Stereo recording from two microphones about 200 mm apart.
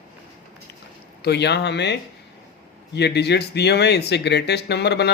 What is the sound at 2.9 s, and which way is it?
Speech, 55° left (ahead or behind).